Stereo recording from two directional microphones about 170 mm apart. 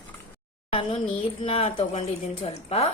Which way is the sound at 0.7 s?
30° left (ahead or behind).